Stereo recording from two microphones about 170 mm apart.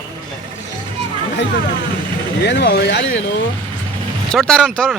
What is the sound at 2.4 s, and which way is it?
Speech, 85° left.